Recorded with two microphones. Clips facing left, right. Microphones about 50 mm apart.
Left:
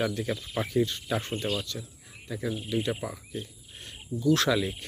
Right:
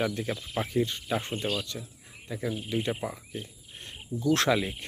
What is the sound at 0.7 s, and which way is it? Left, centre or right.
Speech, right.